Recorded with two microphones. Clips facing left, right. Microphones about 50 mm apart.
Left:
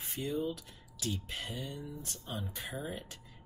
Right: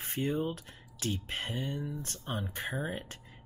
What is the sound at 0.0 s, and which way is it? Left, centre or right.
Speech, right.